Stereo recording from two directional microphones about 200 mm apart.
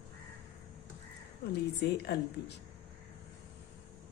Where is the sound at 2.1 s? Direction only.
55° left (ahead or behind).